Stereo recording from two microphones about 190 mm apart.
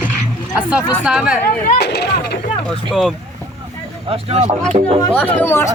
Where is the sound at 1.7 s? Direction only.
55° left (ahead or behind).